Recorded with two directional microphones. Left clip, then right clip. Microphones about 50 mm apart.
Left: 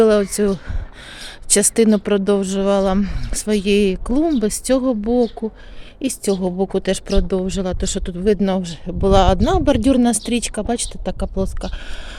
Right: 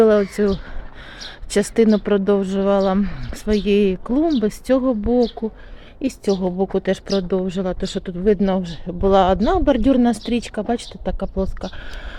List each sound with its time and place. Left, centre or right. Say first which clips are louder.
0.0 s speech: even; left